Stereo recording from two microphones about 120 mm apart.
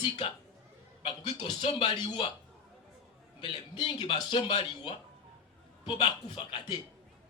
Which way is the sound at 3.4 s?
35° left (ahead or behind).